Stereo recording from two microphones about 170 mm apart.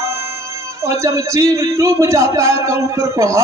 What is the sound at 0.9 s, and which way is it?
A man's voice, 20° right (ahead or behind).